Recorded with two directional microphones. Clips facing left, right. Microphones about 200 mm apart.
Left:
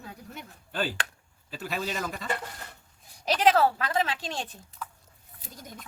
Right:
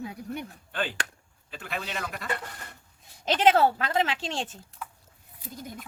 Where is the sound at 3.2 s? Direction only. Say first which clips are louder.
Right 1 dB; 25° right (ahead or behind).